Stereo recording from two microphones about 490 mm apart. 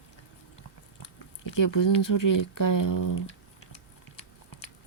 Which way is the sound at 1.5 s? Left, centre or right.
Left.